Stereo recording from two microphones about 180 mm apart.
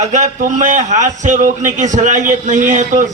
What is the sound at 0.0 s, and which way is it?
A man's voice, 45° right (ahead or behind).